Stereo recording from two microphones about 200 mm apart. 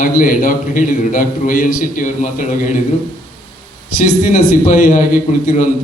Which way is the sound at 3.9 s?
40° left (ahead or behind).